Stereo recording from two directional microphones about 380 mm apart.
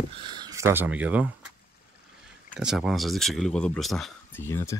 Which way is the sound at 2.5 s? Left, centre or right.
Centre.